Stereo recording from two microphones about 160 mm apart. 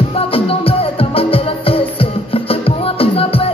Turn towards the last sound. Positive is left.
turn(degrees=35)  # may be behind; listen again after turning